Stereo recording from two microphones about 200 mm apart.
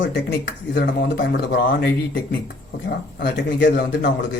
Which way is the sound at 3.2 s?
55° left (ahead or behind).